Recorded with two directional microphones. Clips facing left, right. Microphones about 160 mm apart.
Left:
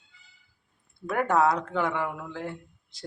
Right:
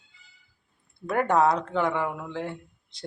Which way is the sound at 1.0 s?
5° left (ahead or behind).